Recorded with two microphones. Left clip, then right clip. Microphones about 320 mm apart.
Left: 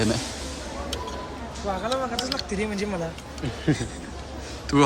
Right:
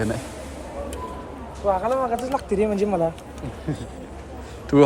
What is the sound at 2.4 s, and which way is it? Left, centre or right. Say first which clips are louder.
Speech: right 7 dB; centre.